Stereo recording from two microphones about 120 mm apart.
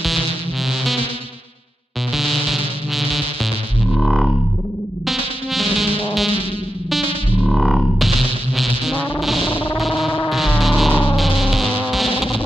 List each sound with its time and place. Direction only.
2.1 s music: centre (ahead or behind)
3.9 s whale vocalization: centre (ahead or behind)
5.0 s music: centre (ahead or behind)
7.3 s music: 5° right (ahead or behind)
9.5 s music: 45° left (ahead or behind)
9.8 s music: centre (ahead or behind)
11.1 s a sound: centre (ahead or behind)
11.9 s vehicle: centre (ahead or behind)